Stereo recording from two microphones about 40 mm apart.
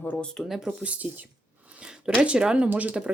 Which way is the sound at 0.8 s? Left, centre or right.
Right.